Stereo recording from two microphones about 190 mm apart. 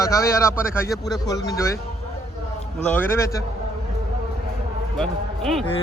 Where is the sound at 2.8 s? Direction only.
10° left (ahead or behind).